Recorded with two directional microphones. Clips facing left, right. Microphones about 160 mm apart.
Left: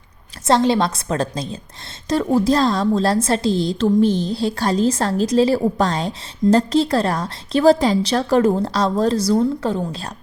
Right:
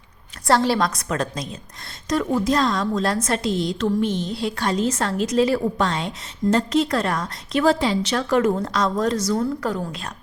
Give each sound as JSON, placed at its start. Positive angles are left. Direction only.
{"t": 0.4, "sound": "a woman's voice", "side_deg": 20}